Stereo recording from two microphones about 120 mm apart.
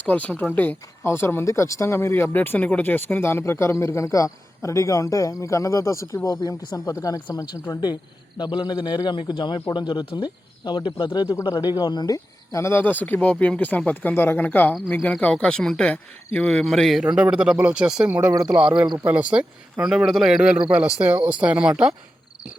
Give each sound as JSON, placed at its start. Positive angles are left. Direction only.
{"t": 0.0, "sound": "a man's voice", "side_deg": 10}